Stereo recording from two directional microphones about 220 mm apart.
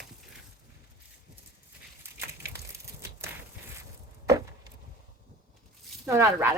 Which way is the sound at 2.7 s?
10° right (ahead or behind).